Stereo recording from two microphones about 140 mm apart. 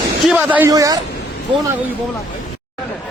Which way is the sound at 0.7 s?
25° right (ahead or behind).